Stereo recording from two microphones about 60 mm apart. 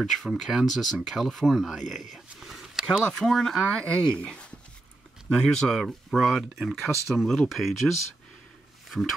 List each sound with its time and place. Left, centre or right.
0.0 s speech: centre
2.4 s a sound: centre
3.2 s speech: centre